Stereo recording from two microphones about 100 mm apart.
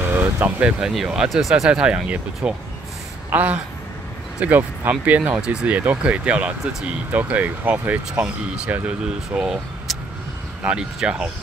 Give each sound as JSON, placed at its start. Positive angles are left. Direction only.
{"t": 0.0, "sound": "vehicle", "side_deg": -25}
{"t": 0.6, "sound": "speech", "side_deg": -10}